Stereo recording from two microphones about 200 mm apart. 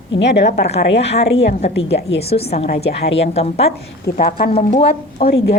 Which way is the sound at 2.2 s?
30° left (ahead or behind).